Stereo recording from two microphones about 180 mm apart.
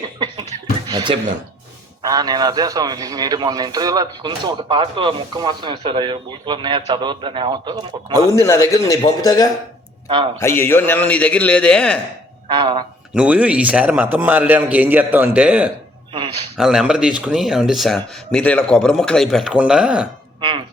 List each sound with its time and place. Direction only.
0.2 s a sound: 25° right (ahead or behind)
2.0 s a man's voice: 20° right (ahead or behind)
8.4 s a man's voice: 15° left (ahead or behind)
12.5 s a man's voice: 25° right (ahead or behind)
13.1 s a man's voice: 5° right (ahead or behind)